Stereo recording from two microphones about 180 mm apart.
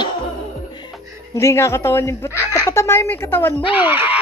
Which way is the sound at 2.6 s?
15° left (ahead or behind).